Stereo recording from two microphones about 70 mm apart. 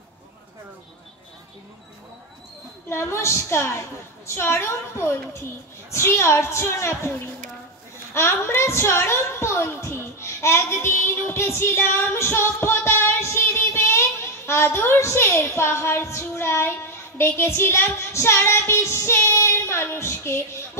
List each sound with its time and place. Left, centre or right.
2.9 s child singing: left
8.1 s a woman's voice: left
17.2 s child singing: left